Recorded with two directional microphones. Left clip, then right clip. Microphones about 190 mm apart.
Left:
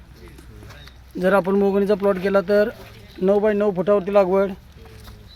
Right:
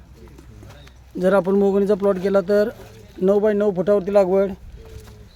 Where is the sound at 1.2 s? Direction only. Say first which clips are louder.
Right 1 dB; 10° right (ahead or behind).